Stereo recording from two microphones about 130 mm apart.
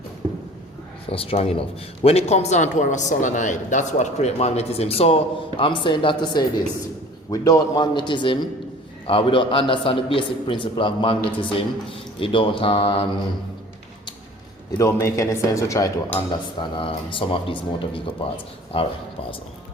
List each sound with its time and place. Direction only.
1.1 s a man's voice: 45° left (ahead or behind)
14.8 s a man's voice: 20° left (ahead or behind)
16.3 s a man's voice: 35° left (ahead or behind)